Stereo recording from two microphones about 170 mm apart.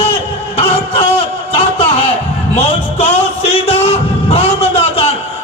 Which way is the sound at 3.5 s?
35° left (ahead or behind).